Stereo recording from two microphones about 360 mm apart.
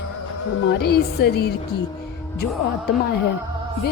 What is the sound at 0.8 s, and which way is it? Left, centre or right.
Speech, left.